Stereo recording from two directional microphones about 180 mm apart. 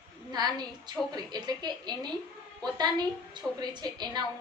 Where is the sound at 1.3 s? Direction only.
25° right (ahead or behind).